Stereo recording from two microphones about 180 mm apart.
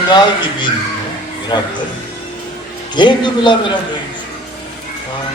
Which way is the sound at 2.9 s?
25° left (ahead or behind).